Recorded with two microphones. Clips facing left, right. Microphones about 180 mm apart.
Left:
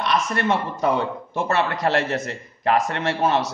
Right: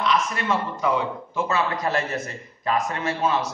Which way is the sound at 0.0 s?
65° left (ahead or behind).